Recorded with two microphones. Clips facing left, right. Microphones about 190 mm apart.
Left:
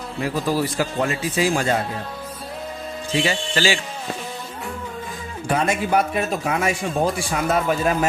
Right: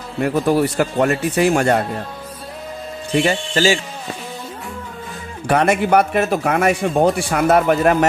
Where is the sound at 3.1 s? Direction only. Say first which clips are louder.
Right 5 dB; 55° right (ahead or behind).